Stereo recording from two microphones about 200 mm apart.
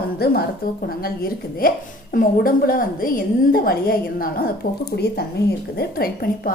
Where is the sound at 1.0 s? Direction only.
45° left (ahead or behind).